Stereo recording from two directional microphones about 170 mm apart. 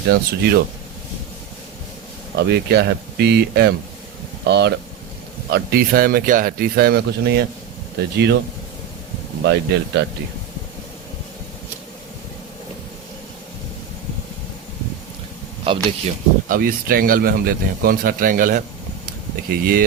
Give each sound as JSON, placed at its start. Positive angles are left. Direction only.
{"t": 0.1, "sound": "speech", "side_deg": -70}
{"t": 2.4, "sound": "speech", "side_deg": -75}
{"t": 5.5, "sound": "speech", "side_deg": -60}
{"t": 9.4, "sound": "speech", "side_deg": -90}
{"t": 15.7, "sound": "speech", "side_deg": -30}
{"t": 16.5, "sound": "speech", "side_deg": -60}
{"t": 19.0, "sound": "a sound", "side_deg": -60}